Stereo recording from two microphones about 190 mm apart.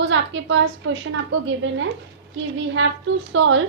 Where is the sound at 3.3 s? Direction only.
85° right.